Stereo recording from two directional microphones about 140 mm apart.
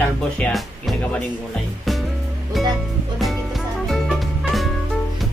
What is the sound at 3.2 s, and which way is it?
Music, centre (ahead or behind).